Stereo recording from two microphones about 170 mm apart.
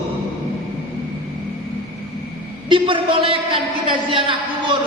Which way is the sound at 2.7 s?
30° right (ahead or behind).